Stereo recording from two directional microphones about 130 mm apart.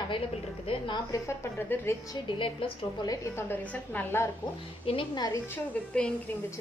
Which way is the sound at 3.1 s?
20° left (ahead or behind).